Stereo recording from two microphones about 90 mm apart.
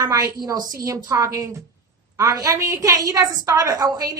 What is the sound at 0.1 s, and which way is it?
A woman's voice, 40° right (ahead or behind).